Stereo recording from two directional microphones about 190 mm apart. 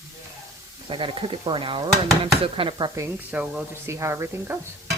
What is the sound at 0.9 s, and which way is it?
Speech, 25° right (ahead or behind).